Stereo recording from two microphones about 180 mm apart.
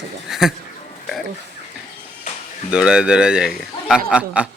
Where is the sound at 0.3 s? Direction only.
Centre (ahead or behind).